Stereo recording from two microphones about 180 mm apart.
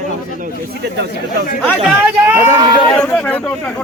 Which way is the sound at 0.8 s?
65° right (ahead or behind).